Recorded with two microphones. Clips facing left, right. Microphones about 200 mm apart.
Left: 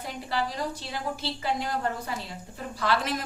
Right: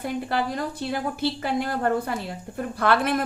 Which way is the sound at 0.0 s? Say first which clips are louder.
Right 5 dB; 55° right (ahead or behind).